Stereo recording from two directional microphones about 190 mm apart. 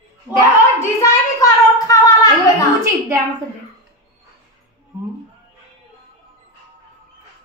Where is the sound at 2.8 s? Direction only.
15° right (ahead or behind).